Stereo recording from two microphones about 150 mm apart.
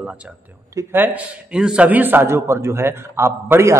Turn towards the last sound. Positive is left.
turn(degrees=-20)  # may be behind; listen again after turning